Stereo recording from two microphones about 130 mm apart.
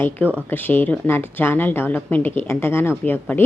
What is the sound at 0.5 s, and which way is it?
A woman's voice, 15° left (ahead or behind).